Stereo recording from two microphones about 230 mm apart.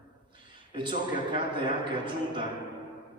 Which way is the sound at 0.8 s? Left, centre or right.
Right.